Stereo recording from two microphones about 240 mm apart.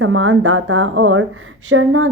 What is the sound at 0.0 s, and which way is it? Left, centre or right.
A woman's voice, right.